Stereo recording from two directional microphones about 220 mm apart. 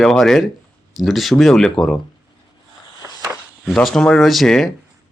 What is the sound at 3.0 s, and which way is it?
Walk, 15° right (ahead or behind).